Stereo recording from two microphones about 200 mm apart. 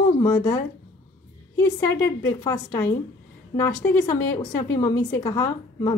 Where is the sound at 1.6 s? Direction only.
15° left (ahead or behind).